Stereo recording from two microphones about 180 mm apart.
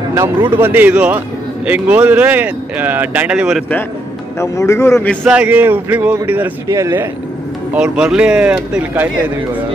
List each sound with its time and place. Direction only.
0.1 s speech: 15° right (ahead or behind)
4.4 s speech: 15° left (ahead or behind)
5.2 s speech: 10° right (ahead or behind)